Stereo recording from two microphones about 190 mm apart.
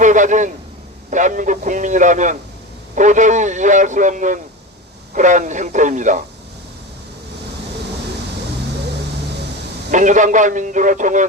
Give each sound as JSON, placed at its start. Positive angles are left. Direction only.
{"t": 0.0, "sound": "a man's voice", "side_deg": -40}
{"t": 9.9, "sound": "a man's voice", "side_deg": -40}